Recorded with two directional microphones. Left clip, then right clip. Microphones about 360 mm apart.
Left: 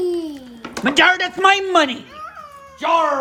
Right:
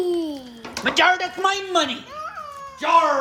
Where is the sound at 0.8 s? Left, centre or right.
Left.